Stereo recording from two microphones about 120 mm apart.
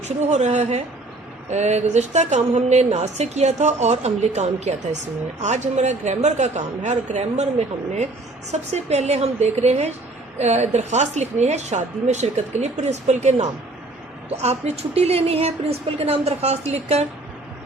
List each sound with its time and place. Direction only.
0.0 s speech: 70° right (ahead or behind)
8.4 s speech: 70° right (ahead or behind)
14.4 s a woman's voice: 60° right (ahead or behind)